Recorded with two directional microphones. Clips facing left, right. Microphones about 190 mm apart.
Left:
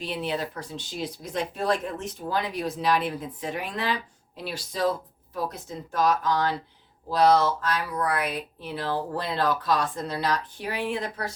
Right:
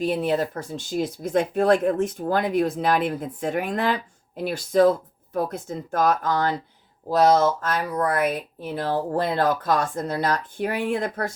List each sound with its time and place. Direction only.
0.0 s speech: 45° right (ahead or behind)